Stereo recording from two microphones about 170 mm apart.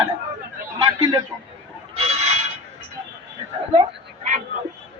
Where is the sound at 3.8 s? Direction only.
45° right (ahead or behind).